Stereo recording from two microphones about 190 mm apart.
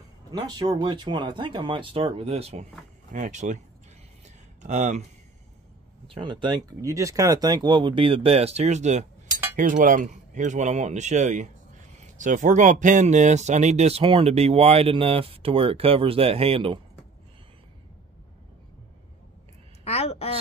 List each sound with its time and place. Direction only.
0.3 s speech: 20° right (ahead or behind); by 3.6 s 40° right (ahead or behind)
4.6 s speech: 40° right (ahead or behind)
6.1 s speech: 25° right (ahead or behind)
19.8 s a sound: 35° left (ahead or behind)